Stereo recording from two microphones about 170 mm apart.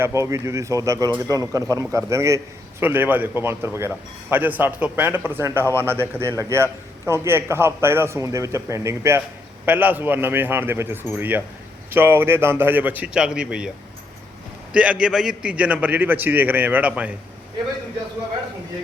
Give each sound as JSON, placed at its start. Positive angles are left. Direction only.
{"t": 0.0, "sound": "a man's voice", "side_deg": -15}
{"t": 14.7, "sound": "a man's voice", "side_deg": -5}